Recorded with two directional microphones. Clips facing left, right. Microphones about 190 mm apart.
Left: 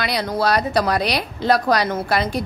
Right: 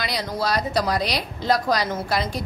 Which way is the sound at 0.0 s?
60° left (ahead or behind).